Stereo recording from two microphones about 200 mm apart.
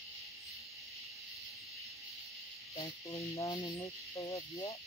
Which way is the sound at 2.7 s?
30° left (ahead or behind).